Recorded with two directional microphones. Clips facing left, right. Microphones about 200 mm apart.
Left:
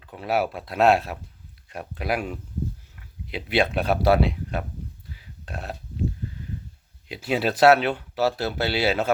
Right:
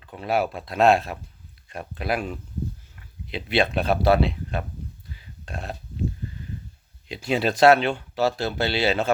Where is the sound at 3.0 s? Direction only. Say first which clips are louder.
Even; 5° left (ahead or behind).